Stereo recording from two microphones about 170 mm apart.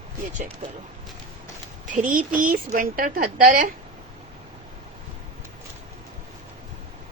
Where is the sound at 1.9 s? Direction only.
50° right (ahead or behind).